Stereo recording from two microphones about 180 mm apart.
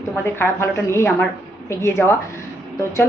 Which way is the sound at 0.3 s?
15° left (ahead or behind).